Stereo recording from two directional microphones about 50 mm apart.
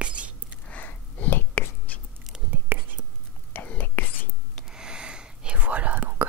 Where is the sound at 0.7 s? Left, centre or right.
Left.